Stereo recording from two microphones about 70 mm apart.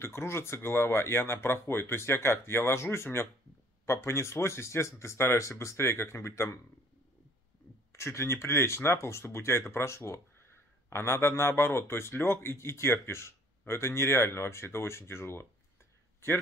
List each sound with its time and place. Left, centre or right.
0.0 s speech: left
7.9 s speech: left